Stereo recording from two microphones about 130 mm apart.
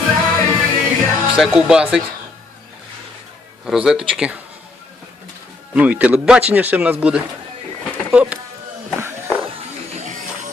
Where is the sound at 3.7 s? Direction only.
5° right (ahead or behind).